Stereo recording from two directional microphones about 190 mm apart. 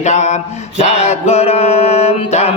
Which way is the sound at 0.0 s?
35° left (ahead or behind).